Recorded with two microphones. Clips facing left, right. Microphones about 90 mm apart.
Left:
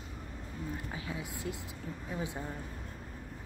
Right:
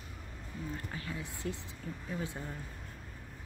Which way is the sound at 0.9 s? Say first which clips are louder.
Left 2 dB; 10° left (ahead or behind).